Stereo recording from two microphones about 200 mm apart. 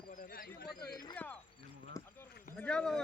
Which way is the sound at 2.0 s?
15° left (ahead or behind).